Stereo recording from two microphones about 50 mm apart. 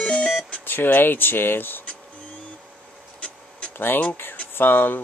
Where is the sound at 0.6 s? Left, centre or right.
Left.